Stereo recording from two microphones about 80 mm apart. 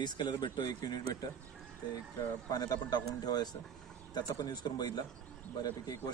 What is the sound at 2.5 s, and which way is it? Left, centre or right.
Speech, left.